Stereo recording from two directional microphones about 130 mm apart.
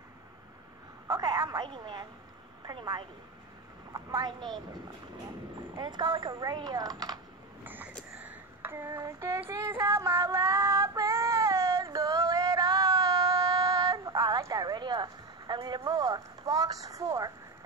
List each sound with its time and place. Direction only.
1.0 s telephone: 25° right (ahead or behind)
1.7 s a woman's voice: 35° right (ahead or behind)
5.8 s speech: 35° right (ahead or behind)
7.6 s a sound: 15° right (ahead or behind)
9.5 s female singing: 25° right (ahead or behind)